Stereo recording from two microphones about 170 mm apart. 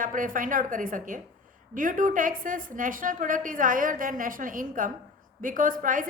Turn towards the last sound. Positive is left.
turn(degrees=-50)  # may be behind; listen again after turning